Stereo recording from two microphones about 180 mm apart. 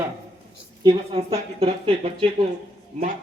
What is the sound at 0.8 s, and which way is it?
A woman's voice, 30° right (ahead or behind).